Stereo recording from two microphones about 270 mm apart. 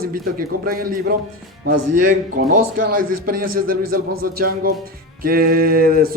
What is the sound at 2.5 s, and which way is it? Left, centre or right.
Speech, right.